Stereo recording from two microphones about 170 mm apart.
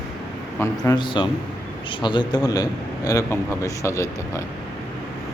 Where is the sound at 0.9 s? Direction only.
25° left (ahead or behind).